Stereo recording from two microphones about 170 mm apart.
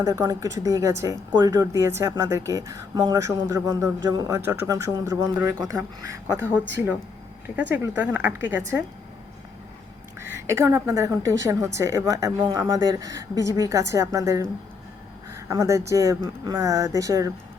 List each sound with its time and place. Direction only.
0.0 s a woman's voice: 20° right (ahead or behind)
10.2 s a woman's voice: 15° right (ahead or behind)
15.4 s a woman's voice: 20° right (ahead or behind)